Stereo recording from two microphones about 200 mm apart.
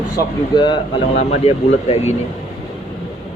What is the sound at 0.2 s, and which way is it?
Speech, 25° left (ahead or behind).